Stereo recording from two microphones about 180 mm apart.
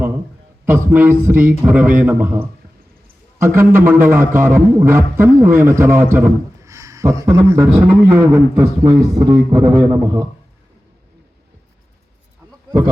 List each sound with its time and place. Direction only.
0.6 s a man's voice: 10° right (ahead or behind)